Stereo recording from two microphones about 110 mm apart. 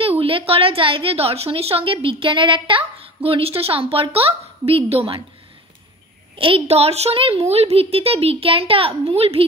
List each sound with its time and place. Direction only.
0.0 s a woman's voice: 60° right (ahead or behind)
6.3 s a woman's voice: 55° right (ahead or behind)